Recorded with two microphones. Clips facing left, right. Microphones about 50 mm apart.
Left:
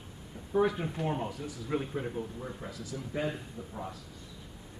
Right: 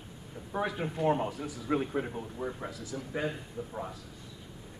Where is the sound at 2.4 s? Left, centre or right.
Right.